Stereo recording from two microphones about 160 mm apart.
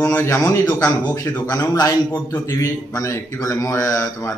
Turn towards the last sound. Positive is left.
turn(degrees=20)  # may be behind; listen again after turning